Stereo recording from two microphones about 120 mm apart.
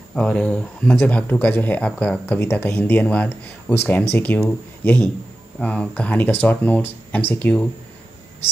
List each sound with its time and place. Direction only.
0.1 s speech: 5° left (ahead or behind)